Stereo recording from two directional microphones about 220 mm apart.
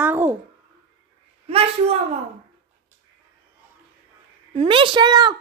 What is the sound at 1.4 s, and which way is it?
Speech, 25° right (ahead or behind).